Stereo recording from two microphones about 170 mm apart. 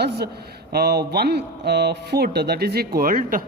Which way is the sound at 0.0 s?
70° right (ahead or behind).